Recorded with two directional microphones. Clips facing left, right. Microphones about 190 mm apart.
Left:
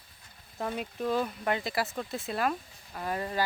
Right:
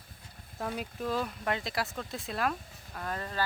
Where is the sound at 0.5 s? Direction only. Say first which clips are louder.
Left 2 dB; centre (ahead or behind).